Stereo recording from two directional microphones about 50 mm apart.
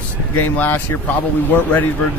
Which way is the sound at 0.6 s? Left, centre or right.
Left.